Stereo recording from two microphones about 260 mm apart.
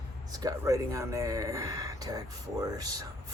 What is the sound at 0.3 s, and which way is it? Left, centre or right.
Speech, centre.